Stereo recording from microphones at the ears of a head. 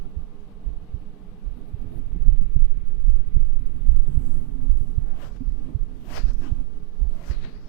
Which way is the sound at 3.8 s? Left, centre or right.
Right.